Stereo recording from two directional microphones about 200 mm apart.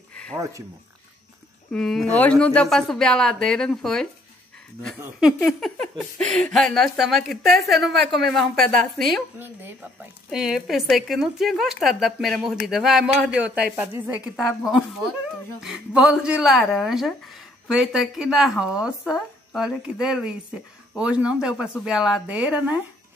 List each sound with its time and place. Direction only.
0.1 s a sound: 5° left (ahead or behind)
0.4 s speech: 15° right (ahead or behind)
1.7 s speech: centre (ahead or behind)
9.4 s speech: 10° right (ahead or behind)